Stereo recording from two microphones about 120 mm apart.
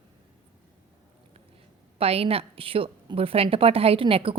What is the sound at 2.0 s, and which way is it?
A woman's voice, 55° right (ahead or behind).